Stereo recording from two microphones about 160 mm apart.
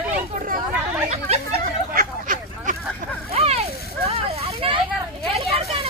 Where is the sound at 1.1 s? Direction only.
40° right (ahead or behind).